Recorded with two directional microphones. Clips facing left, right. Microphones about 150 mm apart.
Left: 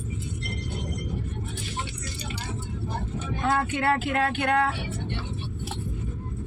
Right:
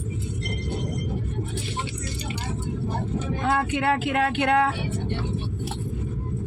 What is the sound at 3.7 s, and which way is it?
Speech, 20° right (ahead or behind).